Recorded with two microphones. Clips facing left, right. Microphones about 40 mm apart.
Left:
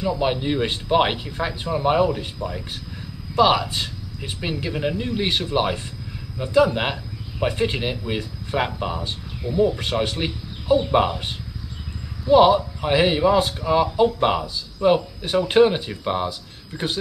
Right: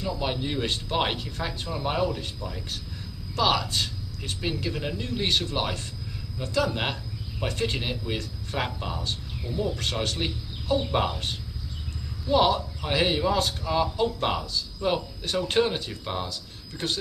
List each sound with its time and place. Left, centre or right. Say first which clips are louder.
0.0 s speech: left 7 dB; left